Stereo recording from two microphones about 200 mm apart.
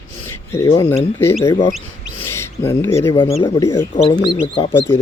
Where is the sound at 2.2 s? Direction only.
10° left (ahead or behind).